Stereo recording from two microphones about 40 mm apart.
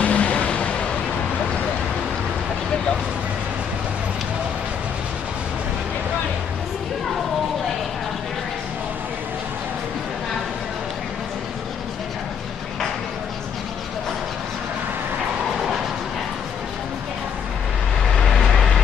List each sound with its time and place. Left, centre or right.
0.0 s vehicle: left